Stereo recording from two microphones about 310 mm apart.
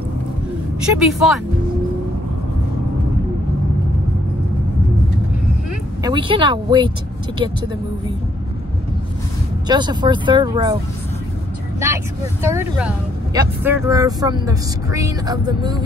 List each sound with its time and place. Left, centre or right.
0.8 s speech: centre
6.0 s speech: centre
9.7 s speech: centre
11.8 s speech: centre